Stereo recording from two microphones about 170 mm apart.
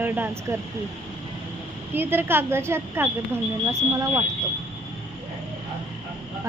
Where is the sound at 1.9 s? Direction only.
10° right (ahead or behind).